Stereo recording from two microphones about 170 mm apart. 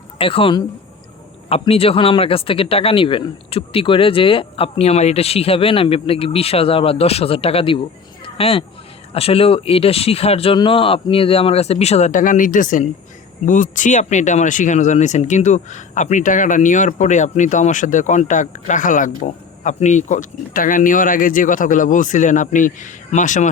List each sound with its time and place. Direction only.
0.2 s speech: 30° left (ahead or behind)
8.2 s a sound: 35° left (ahead or behind)
9.1 s speech: 35° left (ahead or behind)